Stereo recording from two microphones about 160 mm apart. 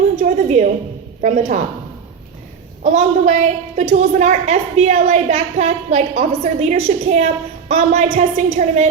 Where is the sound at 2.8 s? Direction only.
50° right (ahead or behind).